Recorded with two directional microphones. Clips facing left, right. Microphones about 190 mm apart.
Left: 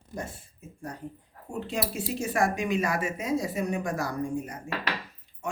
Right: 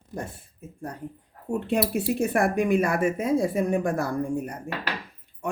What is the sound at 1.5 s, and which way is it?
Speech, 60° right (ahead or behind).